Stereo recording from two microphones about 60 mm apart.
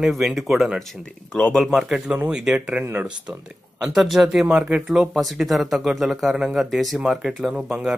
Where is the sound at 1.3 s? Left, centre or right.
Centre.